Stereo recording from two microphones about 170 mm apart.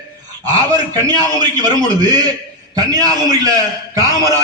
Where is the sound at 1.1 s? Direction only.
25° right (ahead or behind).